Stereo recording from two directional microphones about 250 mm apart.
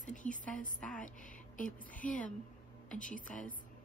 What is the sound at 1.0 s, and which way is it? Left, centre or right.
A woman's voice, left.